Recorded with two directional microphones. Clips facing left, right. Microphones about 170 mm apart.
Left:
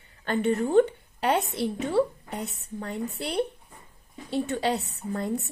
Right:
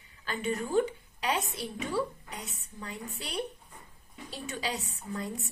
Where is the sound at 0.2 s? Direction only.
60° left (ahead or behind).